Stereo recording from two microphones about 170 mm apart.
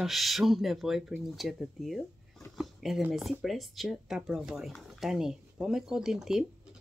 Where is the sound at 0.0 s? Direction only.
Centre (ahead or behind).